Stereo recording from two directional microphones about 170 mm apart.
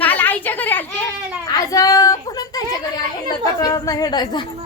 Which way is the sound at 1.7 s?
20° left (ahead or behind).